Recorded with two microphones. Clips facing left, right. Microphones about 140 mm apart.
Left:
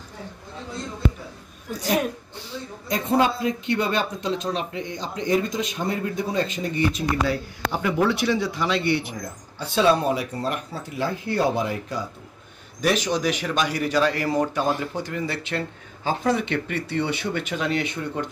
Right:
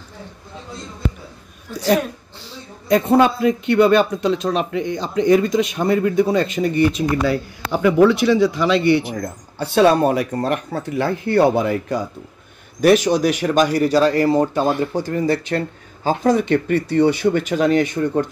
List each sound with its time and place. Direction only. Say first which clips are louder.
2.9 s a man's voice: right 7 dB; 60° right (ahead or behind)
13.0 s speech: right 7 dB; 45° right (ahead or behind)